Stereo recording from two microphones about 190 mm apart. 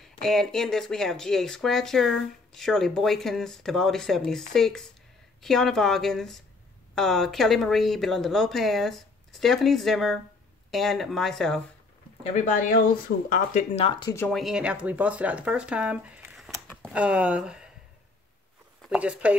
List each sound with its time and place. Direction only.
0.0 s speech: centre (ahead or behind)
12.2 s speech: 35° left (ahead or behind)
12.7 s speech: 45° left (ahead or behind); by 14.1 s 25° left (ahead or behind)
14.1 s speech: 10° left (ahead or behind)
14.4 s speech: 5° right (ahead or behind)
18.8 s speech: 5° right (ahead or behind)